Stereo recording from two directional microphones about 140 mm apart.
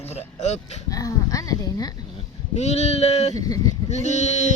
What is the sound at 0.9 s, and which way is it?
Speech, 25° left (ahead or behind).